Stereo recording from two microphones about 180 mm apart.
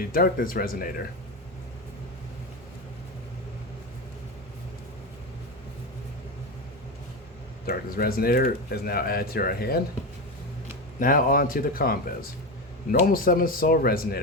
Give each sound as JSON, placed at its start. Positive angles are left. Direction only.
{"t": 0.1, "sound": "speech", "side_deg": 55}
{"t": 7.7, "sound": "speech", "side_deg": 55}
{"t": 11.0, "sound": "speech", "side_deg": 50}